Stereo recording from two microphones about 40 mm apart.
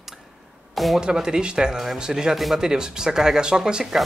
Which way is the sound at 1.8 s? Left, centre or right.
Centre.